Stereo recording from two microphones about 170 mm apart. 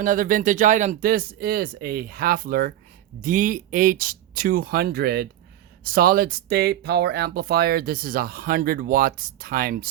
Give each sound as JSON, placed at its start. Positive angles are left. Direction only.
{"t": 0.0, "sound": "speech", "side_deg": -55}